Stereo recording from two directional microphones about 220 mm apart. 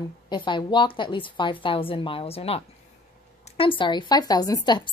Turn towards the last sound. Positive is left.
turn(degrees=20)  # may be behind; listen again after turning